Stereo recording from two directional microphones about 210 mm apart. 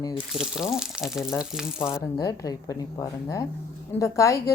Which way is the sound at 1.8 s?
15° left (ahead or behind).